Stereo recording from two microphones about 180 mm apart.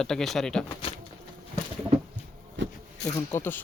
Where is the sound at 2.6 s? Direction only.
90° right.